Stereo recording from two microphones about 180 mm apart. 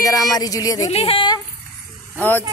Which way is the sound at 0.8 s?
35° left (ahead or behind).